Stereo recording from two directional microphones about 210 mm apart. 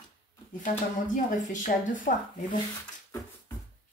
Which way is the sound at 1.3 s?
35° left (ahead or behind).